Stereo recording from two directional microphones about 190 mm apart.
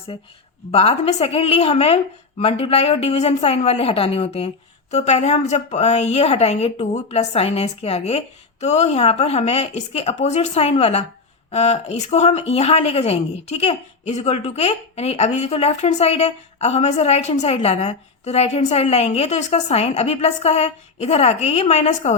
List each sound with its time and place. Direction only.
0.7 s a woman's voice: 30° left (ahead or behind)